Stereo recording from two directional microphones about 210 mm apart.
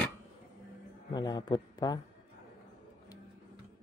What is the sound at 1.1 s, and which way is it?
Speech, 20° left (ahead or behind).